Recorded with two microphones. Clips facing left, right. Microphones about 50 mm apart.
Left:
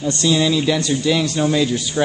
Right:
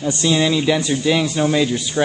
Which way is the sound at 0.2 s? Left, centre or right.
Centre.